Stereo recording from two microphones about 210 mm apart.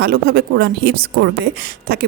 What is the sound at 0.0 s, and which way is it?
A woman's voice, 45° right (ahead or behind).